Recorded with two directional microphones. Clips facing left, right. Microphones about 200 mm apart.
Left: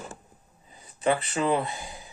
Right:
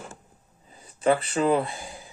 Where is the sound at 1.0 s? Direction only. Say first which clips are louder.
Right 3 dB; 35° right (ahead or behind).